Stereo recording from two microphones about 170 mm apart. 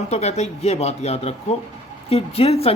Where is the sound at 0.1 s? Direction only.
40° left (ahead or behind).